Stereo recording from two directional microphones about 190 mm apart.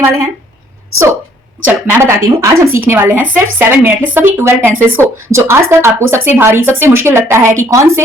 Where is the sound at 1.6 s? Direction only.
10° right (ahead or behind).